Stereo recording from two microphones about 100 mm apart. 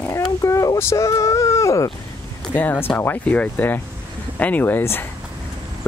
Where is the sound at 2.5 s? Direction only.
20° left (ahead or behind).